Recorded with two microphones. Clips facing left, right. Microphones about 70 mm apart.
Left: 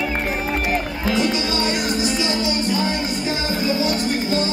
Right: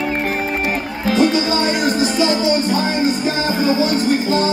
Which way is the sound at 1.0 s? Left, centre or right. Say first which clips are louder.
Right 7 dB; right.